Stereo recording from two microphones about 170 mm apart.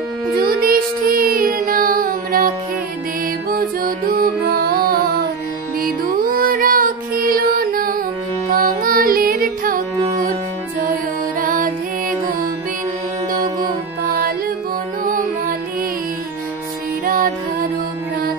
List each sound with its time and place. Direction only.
0.4 s music: 60° right (ahead or behind)
11.4 s music: 55° right (ahead or behind)
15.0 s music: 55° right (ahead or behind)
17.0 s music: 55° right (ahead or behind)